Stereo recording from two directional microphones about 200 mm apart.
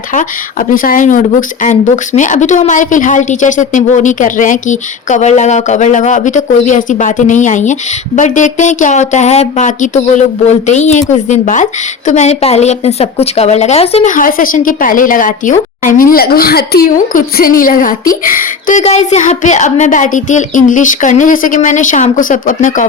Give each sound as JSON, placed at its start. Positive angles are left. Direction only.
{"t": 0.7, "sound": "speech", "side_deg": 45}